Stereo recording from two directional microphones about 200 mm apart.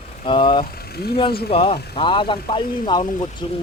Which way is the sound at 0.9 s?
50° left (ahead or behind).